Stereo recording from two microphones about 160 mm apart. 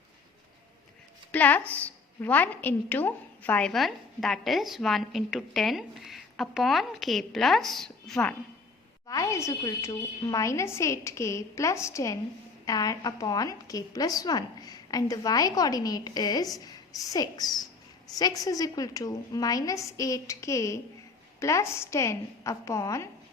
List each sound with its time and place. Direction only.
1.3 s a woman's voice: 10° left (ahead or behind)
9.0 s a woman's voice: 20° left (ahead or behind)